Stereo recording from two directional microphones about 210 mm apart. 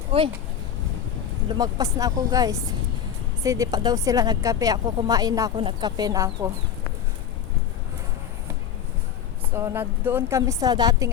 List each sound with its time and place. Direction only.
0.1 s speech: 25° right (ahead or behind)
1.5 s a woman's voice: 15° right (ahead or behind)
9.6 s a woman's voice: 10° right (ahead or behind)